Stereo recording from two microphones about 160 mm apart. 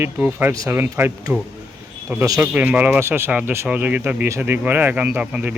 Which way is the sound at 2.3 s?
10° right (ahead or behind).